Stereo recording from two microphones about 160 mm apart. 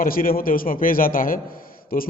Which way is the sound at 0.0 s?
65° left (ahead or behind).